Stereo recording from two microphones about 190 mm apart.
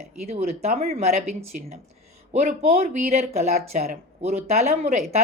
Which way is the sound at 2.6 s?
35° right (ahead or behind).